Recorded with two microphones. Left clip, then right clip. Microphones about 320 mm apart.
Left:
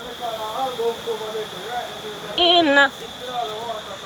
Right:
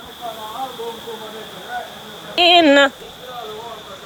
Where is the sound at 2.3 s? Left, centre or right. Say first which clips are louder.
Right 4 dB; right.